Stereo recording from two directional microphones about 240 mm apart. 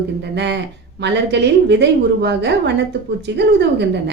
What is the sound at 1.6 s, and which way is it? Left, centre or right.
A woman's voice, right.